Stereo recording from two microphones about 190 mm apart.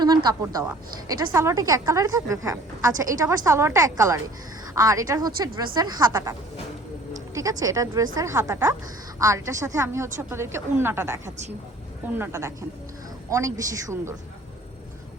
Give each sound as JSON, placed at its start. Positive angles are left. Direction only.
{"t": 0.0, "sound": "a woman's voice", "side_deg": -20}
{"t": 7.3, "sound": "a woman's voice", "side_deg": -15}